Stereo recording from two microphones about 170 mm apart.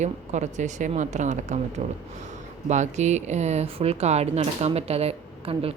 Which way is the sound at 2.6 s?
45° right (ahead or behind).